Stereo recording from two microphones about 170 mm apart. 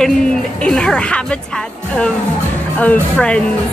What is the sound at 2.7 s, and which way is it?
Speech, 5° left (ahead or behind).